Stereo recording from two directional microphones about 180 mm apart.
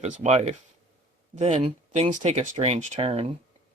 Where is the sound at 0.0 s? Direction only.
40° right (ahead or behind).